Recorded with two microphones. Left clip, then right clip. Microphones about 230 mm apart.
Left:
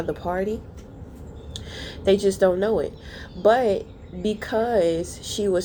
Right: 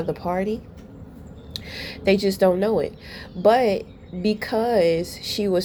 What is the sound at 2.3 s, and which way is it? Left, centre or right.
Speech, right.